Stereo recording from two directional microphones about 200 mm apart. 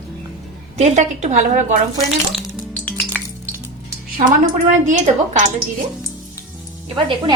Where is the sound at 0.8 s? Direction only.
35° right (ahead or behind).